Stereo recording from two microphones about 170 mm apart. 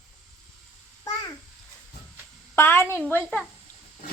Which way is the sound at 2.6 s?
15° left (ahead or behind).